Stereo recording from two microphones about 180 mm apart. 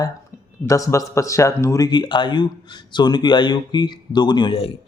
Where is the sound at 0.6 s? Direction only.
15° left (ahead or behind).